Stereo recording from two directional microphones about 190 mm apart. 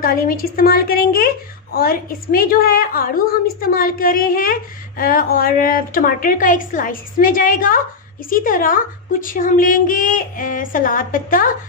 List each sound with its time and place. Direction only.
0.0 s a woman's voice: 50° left (ahead or behind)